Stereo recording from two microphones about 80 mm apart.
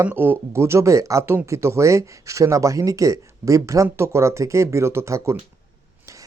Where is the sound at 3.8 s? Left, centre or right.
Right.